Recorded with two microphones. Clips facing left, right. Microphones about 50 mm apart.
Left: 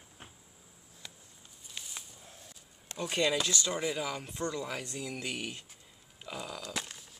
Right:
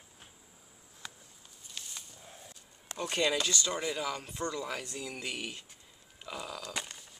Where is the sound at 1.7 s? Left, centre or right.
Centre.